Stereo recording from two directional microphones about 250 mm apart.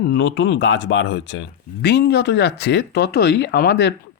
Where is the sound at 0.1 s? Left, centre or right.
Left.